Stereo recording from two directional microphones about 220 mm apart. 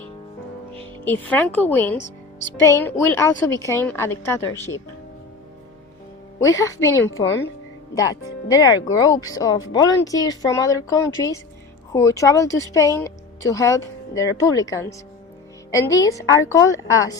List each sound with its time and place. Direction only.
1.0 s speech: 10° left (ahead or behind)
2.0 s music: 55° left (ahead or behind)
2.6 s speech: 10° left (ahead or behind)
6.6 s speech: 15° left (ahead or behind)